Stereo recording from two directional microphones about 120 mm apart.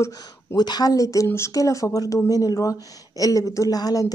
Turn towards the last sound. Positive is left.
turn(degrees=30)  # may be behind; listen again after turning